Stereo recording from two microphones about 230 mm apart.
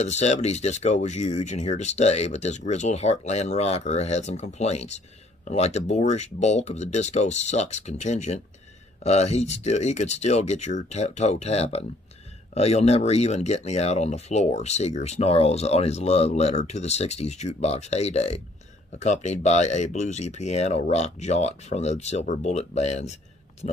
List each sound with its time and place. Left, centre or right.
0.0 s speech: left